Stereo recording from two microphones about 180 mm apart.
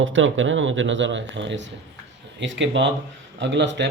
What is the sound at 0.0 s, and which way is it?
Speech, 90° right.